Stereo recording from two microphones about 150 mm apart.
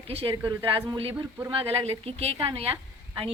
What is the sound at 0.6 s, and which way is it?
A woman's voice, 35° right (ahead or behind).